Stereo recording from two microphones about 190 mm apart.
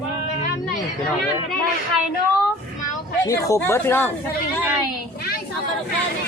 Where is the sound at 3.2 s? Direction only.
15° left (ahead or behind).